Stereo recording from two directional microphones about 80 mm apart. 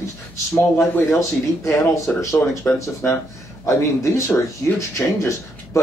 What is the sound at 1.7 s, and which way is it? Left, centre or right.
Speech, left.